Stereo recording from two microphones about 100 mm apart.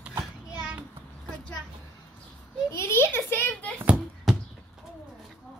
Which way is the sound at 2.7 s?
25° left (ahead or behind).